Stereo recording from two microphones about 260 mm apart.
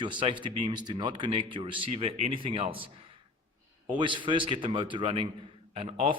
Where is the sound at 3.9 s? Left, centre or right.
Centre.